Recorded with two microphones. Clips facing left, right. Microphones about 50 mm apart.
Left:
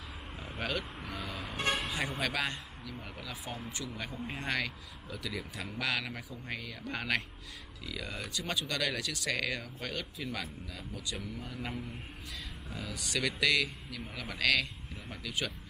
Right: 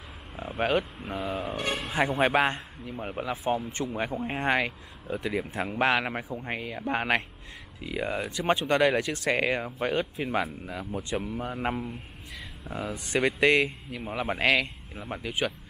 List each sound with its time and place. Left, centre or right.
0.6 s a man's voice: right
12.9 s a man's voice: right